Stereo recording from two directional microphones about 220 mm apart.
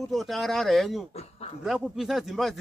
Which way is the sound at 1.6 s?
Centre (ahead or behind).